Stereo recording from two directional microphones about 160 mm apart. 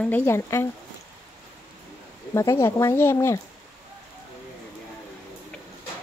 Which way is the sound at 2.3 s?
20° left (ahead or behind).